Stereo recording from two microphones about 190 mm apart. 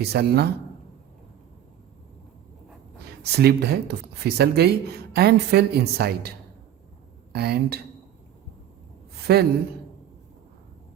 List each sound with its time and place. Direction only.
0.0 s speech: 60° right (ahead or behind)
3.3 s speech: 60° right (ahead or behind)
7.3 s speech: 55° right (ahead or behind)
9.2 s a woman's voice: 55° right (ahead or behind)